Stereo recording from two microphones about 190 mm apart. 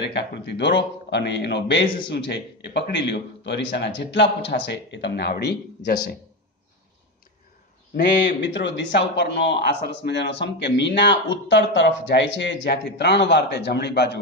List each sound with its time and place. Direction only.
0.0 s speech: 65° left (ahead or behind)
7.9 s speech: 65° left (ahead or behind)